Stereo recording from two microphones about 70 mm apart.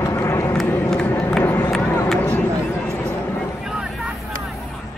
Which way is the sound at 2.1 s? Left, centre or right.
Centre.